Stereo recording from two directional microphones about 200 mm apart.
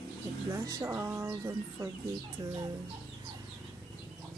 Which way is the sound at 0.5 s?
15° right (ahead or behind).